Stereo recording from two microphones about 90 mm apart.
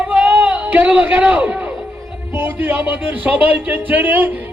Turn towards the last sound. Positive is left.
turn(degrees=-20)  # may be behind; listen again after turning